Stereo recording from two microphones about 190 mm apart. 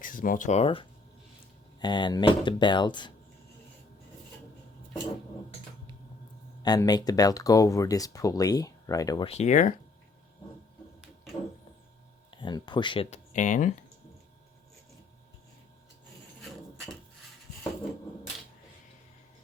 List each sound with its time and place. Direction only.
0.0 s speech: 45° left (ahead or behind); by 3.1 s 25° left (ahead or behind)
6.6 s speech: 20° left (ahead or behind)
9.2 s speech: 35° left (ahead or behind)
12.3 s speech: 25° left (ahead or behind)
13.3 s speech: 40° left (ahead or behind)
16.4 s a sound: centre (ahead or behind)